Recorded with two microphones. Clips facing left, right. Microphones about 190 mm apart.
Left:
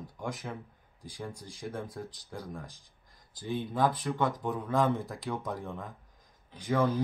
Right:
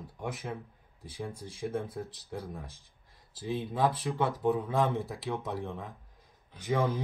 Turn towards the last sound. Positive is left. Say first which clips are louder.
# left 1 dB
turn(degrees=-15)  # may be behind; listen again after turning